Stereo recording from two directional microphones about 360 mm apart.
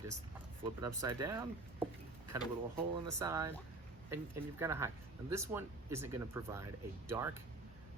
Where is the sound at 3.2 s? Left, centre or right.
Centre.